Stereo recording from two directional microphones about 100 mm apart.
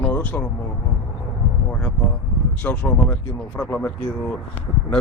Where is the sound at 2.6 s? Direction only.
15° left (ahead or behind).